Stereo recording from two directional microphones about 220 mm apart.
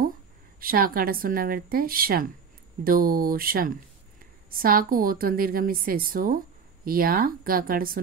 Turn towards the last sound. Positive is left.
turn(degrees=-40)  # may be behind; listen again after turning